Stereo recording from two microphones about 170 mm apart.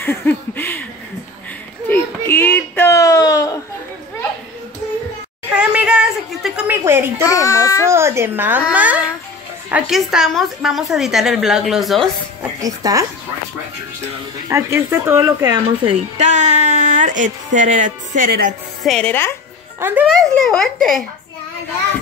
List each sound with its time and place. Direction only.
0.0 s a sound: 10° left (ahead or behind)
1.9 s a sound: 15° left (ahead or behind)
5.5 s a sound: 5° right (ahead or behind)
7.2 s child singing: 20° left (ahead or behind)
7.8 s babbling: 15° right (ahead or behind)
9.7 s a woman's voice: 5° right (ahead or behind)
12.5 s speech: 20° right (ahead or behind)
14.5 s speech: 15° right (ahead or behind)
15.8 s a woman's voice: 40° right (ahead or behind)
18.8 s speech: 5° left (ahead or behind)
19.8 s speech: 10° right (ahead or behind)
20.1 s a woman's voice: 5° left (ahead or behind)